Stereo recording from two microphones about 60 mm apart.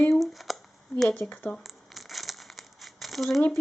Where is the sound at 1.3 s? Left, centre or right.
Left.